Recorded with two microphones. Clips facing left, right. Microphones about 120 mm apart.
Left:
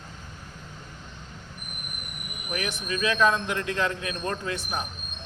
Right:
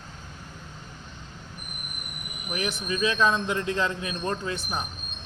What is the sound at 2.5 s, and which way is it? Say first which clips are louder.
A man's voice: right 1 dB; 30° right (ahead or behind).